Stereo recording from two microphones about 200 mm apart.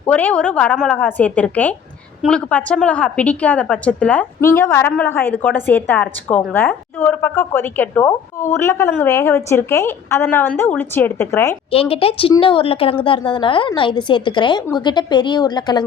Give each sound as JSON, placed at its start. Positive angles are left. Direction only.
{"t": 0.0, "sound": "a woman's voice", "side_deg": 10}
{"t": 11.7, "sound": "a woman's voice", "side_deg": 30}